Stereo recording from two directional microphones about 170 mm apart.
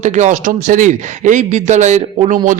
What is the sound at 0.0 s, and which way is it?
A man's voice, 45° right (ahead or behind).